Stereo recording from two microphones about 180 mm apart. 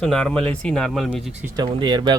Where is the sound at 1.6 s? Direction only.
25° right (ahead or behind).